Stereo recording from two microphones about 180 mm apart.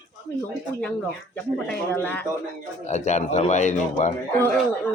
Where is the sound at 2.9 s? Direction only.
40° left (ahead or behind).